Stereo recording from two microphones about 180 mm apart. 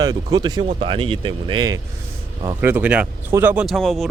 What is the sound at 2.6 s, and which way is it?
Speech, 10° right (ahead or behind).